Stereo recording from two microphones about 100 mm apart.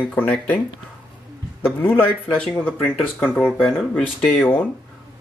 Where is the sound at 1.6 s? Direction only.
20° left (ahead or behind).